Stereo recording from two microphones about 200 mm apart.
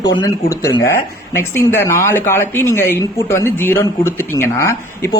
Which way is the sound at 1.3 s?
10° left (ahead or behind).